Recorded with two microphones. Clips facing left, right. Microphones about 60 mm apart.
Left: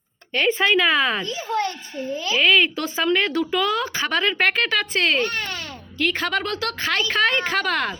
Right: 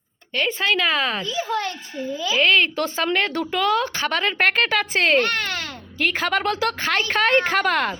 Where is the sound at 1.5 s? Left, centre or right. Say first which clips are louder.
Left 4 dB; right.